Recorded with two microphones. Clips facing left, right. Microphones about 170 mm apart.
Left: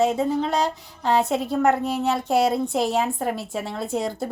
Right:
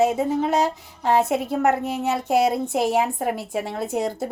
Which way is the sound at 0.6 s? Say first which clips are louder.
Right 1 dB; 5° right (ahead or behind).